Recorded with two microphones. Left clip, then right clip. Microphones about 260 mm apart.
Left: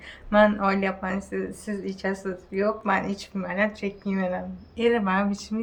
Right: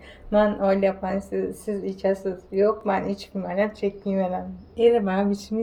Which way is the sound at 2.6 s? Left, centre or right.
Centre.